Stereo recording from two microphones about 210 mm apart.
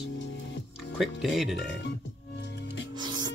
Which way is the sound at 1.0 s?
Centre (ahead or behind).